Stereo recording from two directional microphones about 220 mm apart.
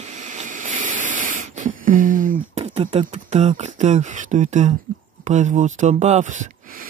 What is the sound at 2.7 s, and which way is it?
Speech, 25° right (ahead or behind).